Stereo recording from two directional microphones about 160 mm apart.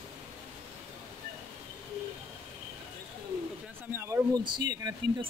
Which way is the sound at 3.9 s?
15° right (ahead or behind).